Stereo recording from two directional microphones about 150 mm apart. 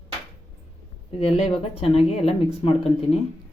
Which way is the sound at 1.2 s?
40° left (ahead or behind).